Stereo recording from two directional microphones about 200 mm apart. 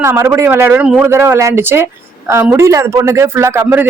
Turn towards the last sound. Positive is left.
turn(degrees=-10)  # may be behind; listen again after turning